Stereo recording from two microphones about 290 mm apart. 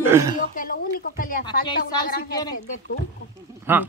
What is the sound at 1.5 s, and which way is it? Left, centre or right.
Speech, centre.